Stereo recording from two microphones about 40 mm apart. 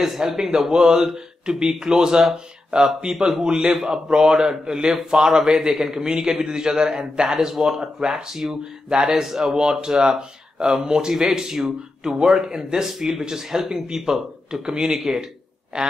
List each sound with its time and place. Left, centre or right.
0.0 s speech: centre